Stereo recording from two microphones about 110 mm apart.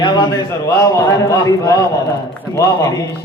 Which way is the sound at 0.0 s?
40° left (ahead or behind).